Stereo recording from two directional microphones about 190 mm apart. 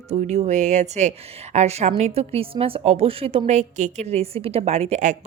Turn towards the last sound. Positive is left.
turn(degrees=-40)  # may be behind; listen again after turning